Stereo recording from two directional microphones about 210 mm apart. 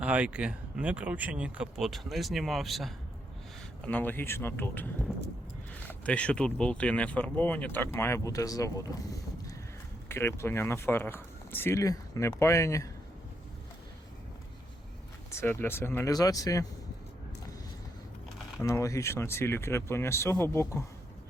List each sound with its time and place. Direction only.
0.0 s speech: 5° right (ahead or behind); by 8.8 s 15° left (ahead or behind)
10.1 s speech: 10° left (ahead or behind)
15.3 s speech: 10° left (ahead or behind)
18.6 s speech: 15° left (ahead or behind)